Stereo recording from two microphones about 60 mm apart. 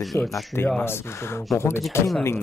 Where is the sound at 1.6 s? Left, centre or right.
Left.